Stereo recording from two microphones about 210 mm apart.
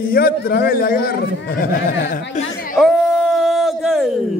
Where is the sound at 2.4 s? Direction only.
35° left (ahead or behind).